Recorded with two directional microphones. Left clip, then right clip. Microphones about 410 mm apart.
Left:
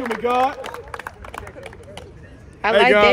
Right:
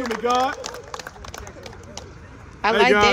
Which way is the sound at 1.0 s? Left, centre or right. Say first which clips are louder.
Left 3 dB; centre.